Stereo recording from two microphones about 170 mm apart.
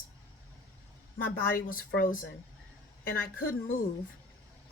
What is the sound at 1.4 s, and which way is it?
Speech, 55° left (ahead or behind).